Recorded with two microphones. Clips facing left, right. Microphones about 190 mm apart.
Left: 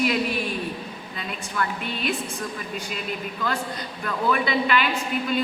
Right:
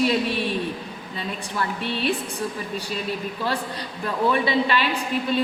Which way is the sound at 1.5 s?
30° right (ahead or behind).